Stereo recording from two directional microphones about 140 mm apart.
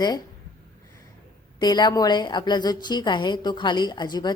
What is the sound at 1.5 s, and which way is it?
A woman's voice, 30° left (ahead or behind).